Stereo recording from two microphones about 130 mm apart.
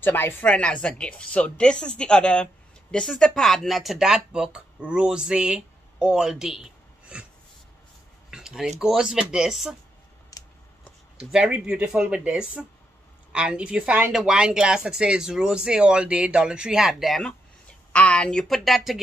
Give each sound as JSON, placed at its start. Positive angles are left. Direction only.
{"t": 0.0, "sound": "speech", "side_deg": 15}
{"t": 8.3, "sound": "speech", "side_deg": -5}
{"t": 10.3, "sound": "a sound", "side_deg": 25}
{"t": 11.1, "sound": "speech", "side_deg": -5}